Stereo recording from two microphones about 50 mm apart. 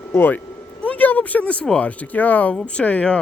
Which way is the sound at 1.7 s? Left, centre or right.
Left.